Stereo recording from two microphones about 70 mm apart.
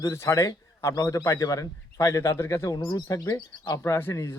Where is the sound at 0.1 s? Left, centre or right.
Left.